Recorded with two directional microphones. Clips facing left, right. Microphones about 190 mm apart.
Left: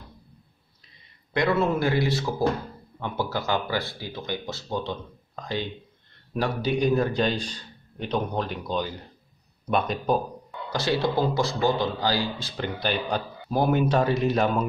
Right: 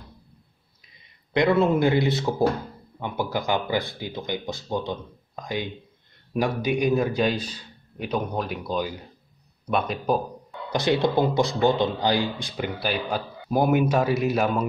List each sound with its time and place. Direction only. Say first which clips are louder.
1.3 s speech: right 3 dB; 20° right (ahead or behind)
10.7 s speech: right 3 dB; 20° right (ahead or behind)